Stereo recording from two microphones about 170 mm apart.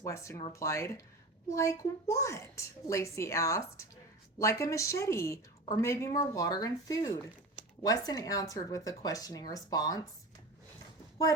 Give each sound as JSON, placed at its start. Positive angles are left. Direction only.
{"t": 0.0, "sound": "a woman's voice", "side_deg": 15}